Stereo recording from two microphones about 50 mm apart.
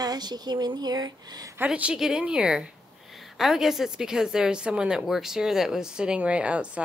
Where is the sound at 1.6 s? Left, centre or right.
Right.